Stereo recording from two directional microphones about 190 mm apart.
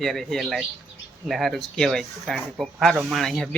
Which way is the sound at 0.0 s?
Centre (ahead or behind).